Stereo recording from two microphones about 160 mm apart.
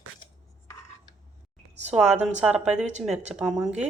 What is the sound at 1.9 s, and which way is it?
A woman's voice, 5° right (ahead or behind).